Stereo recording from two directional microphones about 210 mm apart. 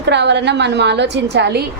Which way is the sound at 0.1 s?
55° right (ahead or behind).